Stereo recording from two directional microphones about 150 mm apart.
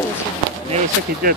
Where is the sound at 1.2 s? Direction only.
75° right (ahead or behind).